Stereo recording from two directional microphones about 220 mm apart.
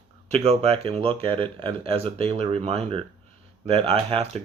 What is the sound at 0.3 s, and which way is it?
Speech, 30° right (ahead or behind).